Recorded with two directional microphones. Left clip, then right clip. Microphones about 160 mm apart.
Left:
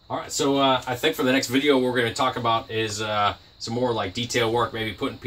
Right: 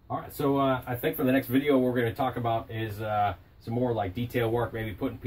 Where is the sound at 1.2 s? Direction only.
5° left (ahead or behind).